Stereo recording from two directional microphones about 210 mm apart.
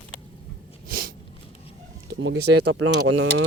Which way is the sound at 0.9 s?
45° right (ahead or behind).